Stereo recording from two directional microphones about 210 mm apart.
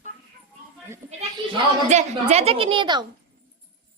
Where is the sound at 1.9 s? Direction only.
30° right (ahead or behind).